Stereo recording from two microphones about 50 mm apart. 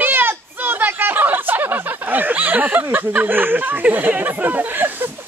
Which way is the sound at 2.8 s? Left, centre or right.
Right.